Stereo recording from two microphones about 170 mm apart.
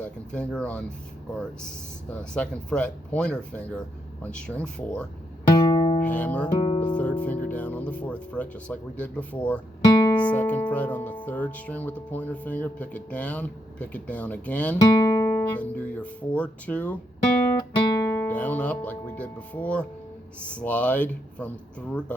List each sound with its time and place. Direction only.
0.0 s speech: 5° left (ahead or behind)
2.0 s speech: 5° left (ahead or behind)
5.6 s music: 25° left (ahead or behind)
6.1 s music: 10° left (ahead or behind)
6.6 s music: 35° left (ahead or behind)
6.8 s music: 5° left (ahead or behind)
9.8 s music: 20° left (ahead or behind)
10.2 s speech: 10° left (ahead or behind)